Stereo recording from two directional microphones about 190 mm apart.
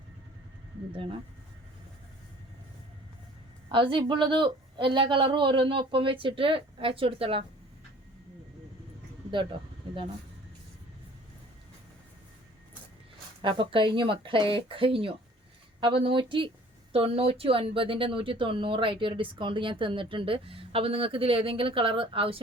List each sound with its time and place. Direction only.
3.7 s speech: 25° right (ahead or behind)
9.3 s speech: 25° right (ahead or behind)
13.4 s speech: 25° right (ahead or behind)